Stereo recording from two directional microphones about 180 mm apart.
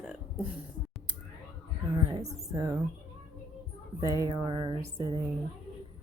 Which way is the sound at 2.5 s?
15° right (ahead or behind).